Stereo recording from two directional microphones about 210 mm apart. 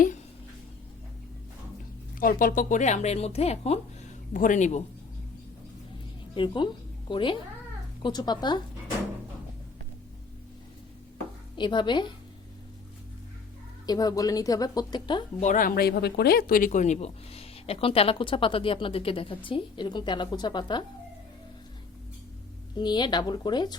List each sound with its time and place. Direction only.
2.1 s speech: 40° left (ahead or behind)
6.3 s speech: 20° left (ahead or behind)
11.5 s speech: 20° left (ahead or behind)
13.8 s speech: 20° left (ahead or behind)
15.4 s speech: 40° left (ahead or behind); by 20.8 s 20° left (ahead or behind)
22.8 s speech: 20° left (ahead or behind)